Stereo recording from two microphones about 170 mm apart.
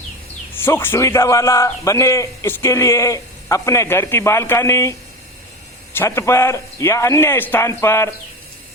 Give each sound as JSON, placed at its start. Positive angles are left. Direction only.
{"t": 0.6, "sound": "a man's voice", "side_deg": 15}